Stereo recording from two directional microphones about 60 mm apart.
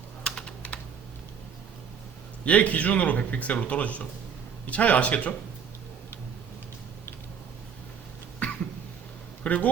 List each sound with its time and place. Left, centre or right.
0.3 s typing: centre
2.4 s speech: left
8.4 s cough: left
9.4 s a sound: left